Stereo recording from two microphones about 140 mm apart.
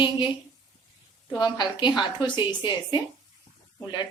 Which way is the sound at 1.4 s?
35° left (ahead or behind).